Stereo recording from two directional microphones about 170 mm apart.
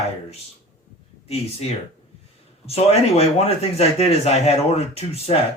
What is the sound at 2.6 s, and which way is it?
A man's voice, 35° left (ahead or behind).